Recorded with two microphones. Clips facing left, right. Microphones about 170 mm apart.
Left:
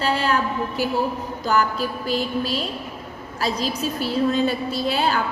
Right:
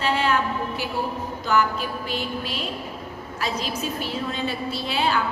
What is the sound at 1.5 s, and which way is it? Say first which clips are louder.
A woman's voice: left 1 dB; 35° left (ahead or behind).